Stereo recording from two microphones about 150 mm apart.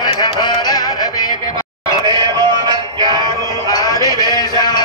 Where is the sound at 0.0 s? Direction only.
25° left (ahead or behind).